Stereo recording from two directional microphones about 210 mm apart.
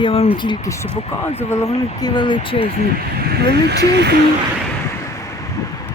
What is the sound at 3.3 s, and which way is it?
Speech, 50° right (ahead or behind).